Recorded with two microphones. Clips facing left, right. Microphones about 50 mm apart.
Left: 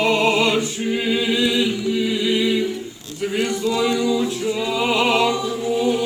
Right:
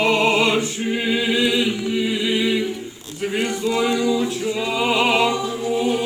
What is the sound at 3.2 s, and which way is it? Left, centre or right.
Opera, right.